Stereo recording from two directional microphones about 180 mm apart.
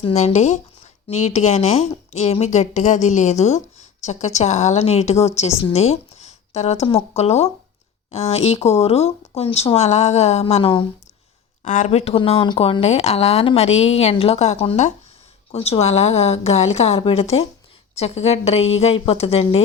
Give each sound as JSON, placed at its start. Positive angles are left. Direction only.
{"t": 0.0, "sound": "speech", "side_deg": 35}
{"t": 11.6, "sound": "speech", "side_deg": 45}